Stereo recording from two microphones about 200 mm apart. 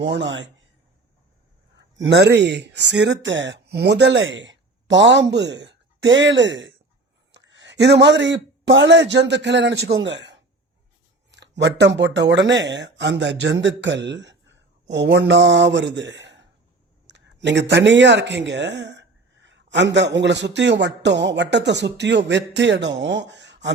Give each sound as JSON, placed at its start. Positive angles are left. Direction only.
{"t": 0.0, "sound": "speech", "side_deg": -60}
{"t": 2.0, "sound": "speech", "side_deg": -60}
{"t": 11.3, "sound": "a sound", "side_deg": -60}
{"t": 11.9, "sound": "speech", "side_deg": -60}
{"t": 17.1, "sound": "a sound", "side_deg": -60}
{"t": 19.7, "sound": "speech", "side_deg": -60}